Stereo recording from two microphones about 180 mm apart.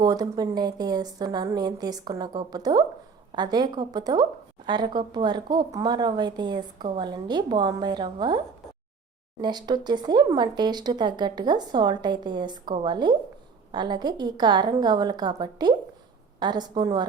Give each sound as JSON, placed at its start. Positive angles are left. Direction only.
{"t": 0.0, "sound": "speech", "side_deg": -20}
{"t": 9.4, "sound": "speech", "side_deg": -25}